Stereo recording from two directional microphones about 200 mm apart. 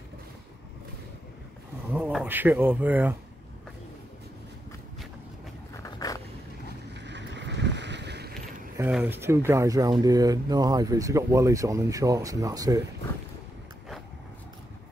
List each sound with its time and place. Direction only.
2.0 s speech: 10° right (ahead or behind)
5.8 s a sound: 15° left (ahead or behind)
6.9 s boat: 60° right (ahead or behind)
8.7 s speech: 10° right (ahead or behind)